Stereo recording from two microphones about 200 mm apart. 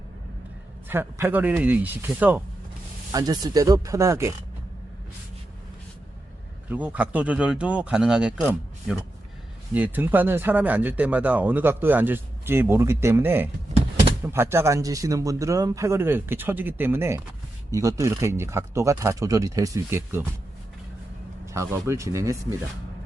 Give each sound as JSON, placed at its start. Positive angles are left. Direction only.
{"t": 0.9, "sound": "speech", "side_deg": -10}
{"t": 6.7, "sound": "speech", "side_deg": -5}
{"t": 21.4, "sound": "speech", "side_deg": -15}